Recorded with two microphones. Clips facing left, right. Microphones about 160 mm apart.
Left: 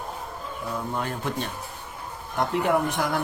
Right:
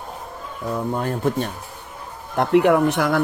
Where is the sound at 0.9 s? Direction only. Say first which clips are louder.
Right 8 dB; 45° right (ahead or behind).